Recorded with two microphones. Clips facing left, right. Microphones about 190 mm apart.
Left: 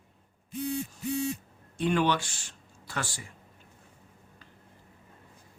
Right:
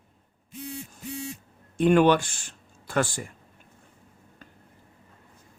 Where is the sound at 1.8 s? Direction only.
55° right (ahead or behind).